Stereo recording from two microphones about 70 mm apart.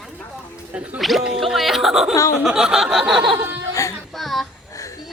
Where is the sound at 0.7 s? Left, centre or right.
Centre.